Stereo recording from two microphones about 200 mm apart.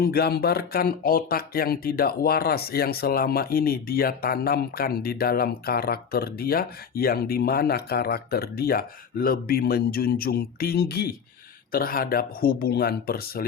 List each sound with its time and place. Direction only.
0.0 s speech: 50° left (ahead or behind)